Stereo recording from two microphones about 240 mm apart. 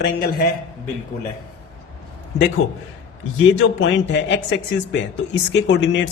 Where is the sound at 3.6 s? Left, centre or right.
Left.